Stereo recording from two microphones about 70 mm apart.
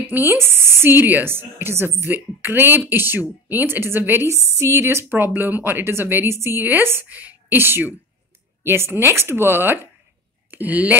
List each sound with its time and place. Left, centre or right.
0.0 s speech: right
10.5 s speech: right